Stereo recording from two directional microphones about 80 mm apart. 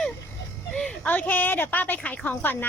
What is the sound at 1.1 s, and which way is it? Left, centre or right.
A woman's voice, left.